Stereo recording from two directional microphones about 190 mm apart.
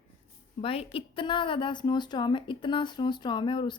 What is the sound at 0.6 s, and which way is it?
Speech, 30° left (ahead or behind).